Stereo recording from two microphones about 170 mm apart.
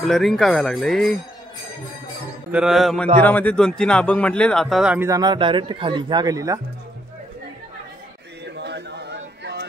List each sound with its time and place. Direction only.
0.0 s speech: centre (ahead or behind)
2.5 s speech: centre (ahead or behind)
5.0 s a man's voice: 20° right (ahead or behind)
8.5 s a sound: 80° right